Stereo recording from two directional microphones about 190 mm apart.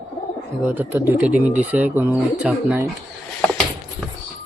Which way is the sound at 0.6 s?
10° right (ahead or behind).